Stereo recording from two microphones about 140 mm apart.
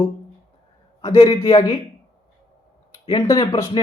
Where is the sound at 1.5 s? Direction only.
20° left (ahead or behind).